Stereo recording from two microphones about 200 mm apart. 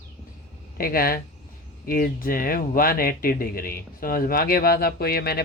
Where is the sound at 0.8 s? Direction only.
50° left (ahead or behind).